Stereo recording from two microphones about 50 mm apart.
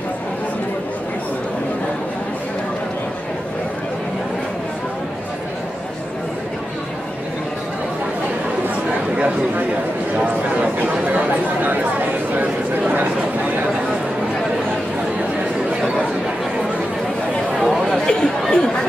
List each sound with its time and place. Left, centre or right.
10.1 s chatter: right
17.6 s chatter: centre
18.0 s chatter: centre